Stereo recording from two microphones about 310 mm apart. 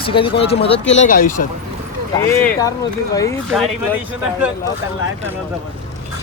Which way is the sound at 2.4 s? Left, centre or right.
Centre.